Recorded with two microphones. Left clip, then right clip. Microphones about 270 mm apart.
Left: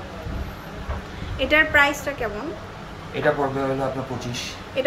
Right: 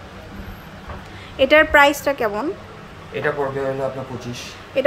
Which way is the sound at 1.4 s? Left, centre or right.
Centre.